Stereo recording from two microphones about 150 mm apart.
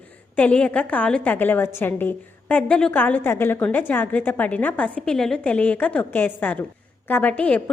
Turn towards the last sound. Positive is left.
turn(degrees=10)  # may be behind; listen again after turning